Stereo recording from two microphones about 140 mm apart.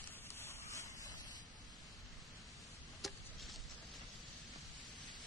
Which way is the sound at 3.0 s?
Centre (ahead or behind).